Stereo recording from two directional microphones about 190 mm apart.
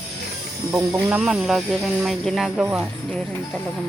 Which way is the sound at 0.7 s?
15° right (ahead or behind).